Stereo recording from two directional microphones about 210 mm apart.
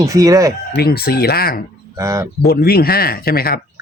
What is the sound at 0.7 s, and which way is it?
Speech, 50° left (ahead or behind).